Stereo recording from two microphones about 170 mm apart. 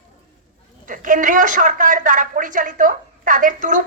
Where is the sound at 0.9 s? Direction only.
50° right (ahead or behind).